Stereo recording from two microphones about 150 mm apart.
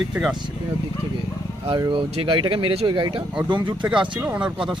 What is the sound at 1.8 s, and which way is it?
Speech, 35° right (ahead or behind).